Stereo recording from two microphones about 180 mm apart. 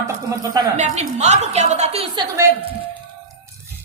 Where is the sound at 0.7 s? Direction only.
40° right (ahead or behind).